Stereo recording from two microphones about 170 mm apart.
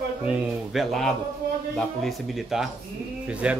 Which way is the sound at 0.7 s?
Centre (ahead or behind).